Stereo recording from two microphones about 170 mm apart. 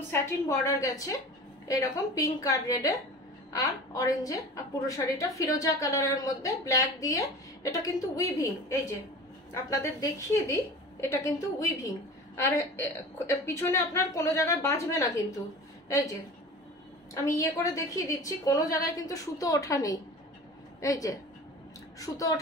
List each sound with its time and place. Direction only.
0.1 s a woman's voice: 20° left (ahead or behind)
17.1 s a woman's voice: 20° left (ahead or behind)